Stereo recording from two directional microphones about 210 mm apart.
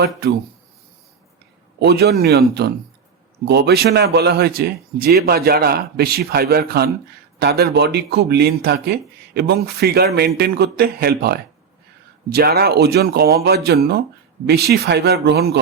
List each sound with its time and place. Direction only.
0.2 s speech: 50° right (ahead or behind)
1.8 s speech: 50° right (ahead or behind)